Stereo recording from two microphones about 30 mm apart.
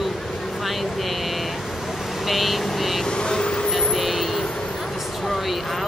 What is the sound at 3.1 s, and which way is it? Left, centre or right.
Speech, left.